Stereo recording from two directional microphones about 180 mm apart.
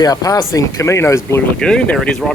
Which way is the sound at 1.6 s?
5° left (ahead or behind).